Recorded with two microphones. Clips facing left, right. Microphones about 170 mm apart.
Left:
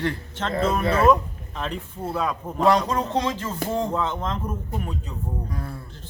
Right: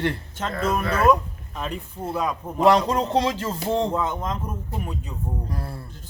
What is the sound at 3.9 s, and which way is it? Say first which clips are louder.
Speech: even; 10° right (ahead or behind).